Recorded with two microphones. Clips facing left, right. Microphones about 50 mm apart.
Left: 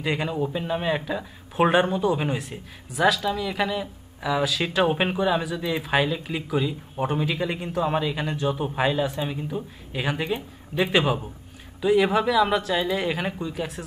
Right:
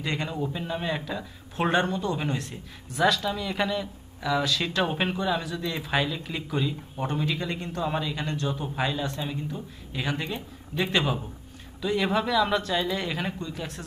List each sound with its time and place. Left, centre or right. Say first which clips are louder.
0.0 s speech: left 4 dB; centre